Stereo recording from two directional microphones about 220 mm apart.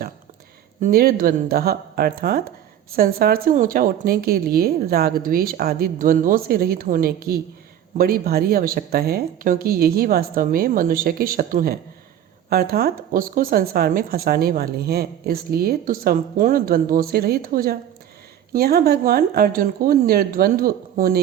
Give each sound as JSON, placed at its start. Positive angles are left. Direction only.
{"t": 0.8, "sound": "speech", "side_deg": -40}